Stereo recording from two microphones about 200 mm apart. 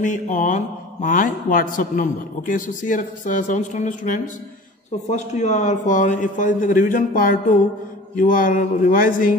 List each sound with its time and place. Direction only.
0.0 s a man's voice: 40° left (ahead or behind)